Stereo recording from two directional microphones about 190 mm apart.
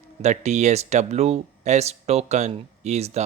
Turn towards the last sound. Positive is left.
turn(degrees=-35)  # may be behind; listen again after turning